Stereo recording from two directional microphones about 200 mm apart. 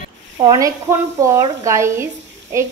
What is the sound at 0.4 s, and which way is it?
A woman's voice, 20° right (ahead or behind).